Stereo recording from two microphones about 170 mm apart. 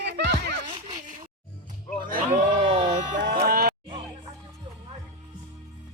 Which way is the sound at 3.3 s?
65° right (ahead or behind).